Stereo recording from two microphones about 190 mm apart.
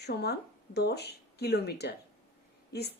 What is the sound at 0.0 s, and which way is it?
A woman's voice, 60° left (ahead or behind).